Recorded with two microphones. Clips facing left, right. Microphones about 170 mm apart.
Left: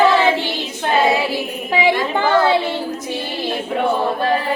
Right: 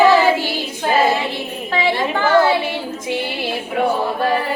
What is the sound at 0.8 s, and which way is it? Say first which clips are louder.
Child singing: even; centre (ahead or behind).